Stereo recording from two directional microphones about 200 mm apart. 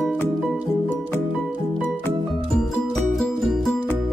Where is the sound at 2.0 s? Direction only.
Centre (ahead or behind).